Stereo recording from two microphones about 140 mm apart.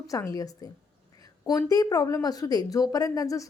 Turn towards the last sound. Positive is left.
turn(degrees=25)  # may be behind; listen again after turning